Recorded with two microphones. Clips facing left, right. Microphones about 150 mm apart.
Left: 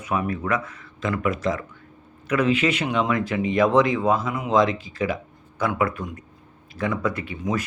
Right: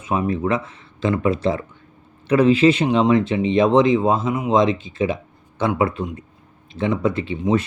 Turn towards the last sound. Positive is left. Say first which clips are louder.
# right 7 dB
turn(degrees=-25)  # may be behind; listen again after turning